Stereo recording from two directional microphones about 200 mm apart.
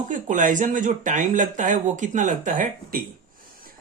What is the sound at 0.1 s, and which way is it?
Speech, 40° right (ahead or behind).